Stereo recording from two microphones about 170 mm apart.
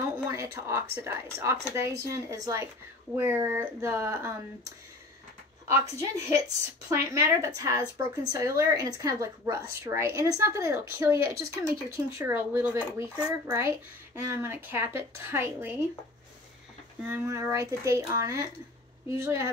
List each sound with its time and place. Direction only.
0.3 s speech: 15° right (ahead or behind)
5.7 s a woman's voice: 15° right (ahead or behind)
17.0 s speech: 10° right (ahead or behind)